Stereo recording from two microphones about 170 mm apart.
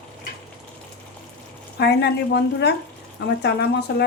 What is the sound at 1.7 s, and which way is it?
A woman's voice, 75° left (ahead or behind).